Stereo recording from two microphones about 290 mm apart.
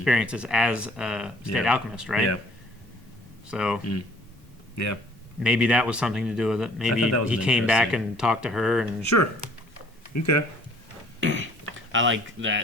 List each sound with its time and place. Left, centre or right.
0.0 s speech: centre
3.5 s speech: centre
4.7 s speech: left
5.4 s speech: centre
6.9 s speech: left
7.3 s speech: centre
10.1 s speech: left
11.2 s a sound: right
11.9 s speech: right